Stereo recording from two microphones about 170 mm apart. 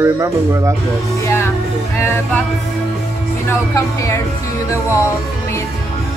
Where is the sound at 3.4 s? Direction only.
15° left (ahead or behind).